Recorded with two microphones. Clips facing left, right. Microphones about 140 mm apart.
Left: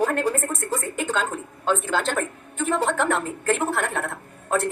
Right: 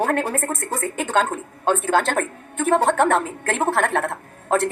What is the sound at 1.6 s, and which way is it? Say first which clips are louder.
A woman's voice: right 4 dB; 55° right (ahead or behind).